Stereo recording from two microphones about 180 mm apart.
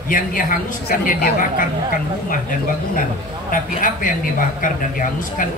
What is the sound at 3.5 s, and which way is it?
Speech, 50° left (ahead or behind).